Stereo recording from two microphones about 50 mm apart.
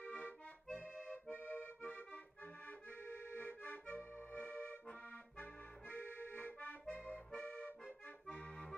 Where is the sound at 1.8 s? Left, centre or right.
Left.